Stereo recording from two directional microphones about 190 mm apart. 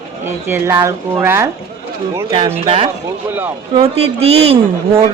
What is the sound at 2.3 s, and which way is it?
A man's voice, 30° right (ahead or behind).